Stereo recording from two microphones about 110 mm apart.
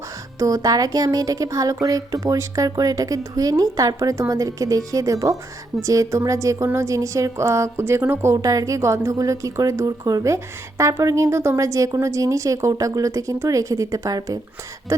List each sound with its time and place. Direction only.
0.3 s a woman's voice: 30° right (ahead or behind)